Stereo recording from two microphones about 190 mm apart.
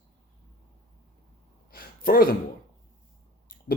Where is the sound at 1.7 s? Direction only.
50° left (ahead or behind).